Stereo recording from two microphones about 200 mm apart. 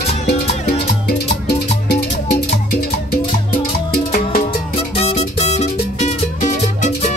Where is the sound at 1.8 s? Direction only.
55° left (ahead or behind).